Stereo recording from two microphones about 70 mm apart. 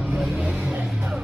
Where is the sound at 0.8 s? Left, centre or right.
Centre.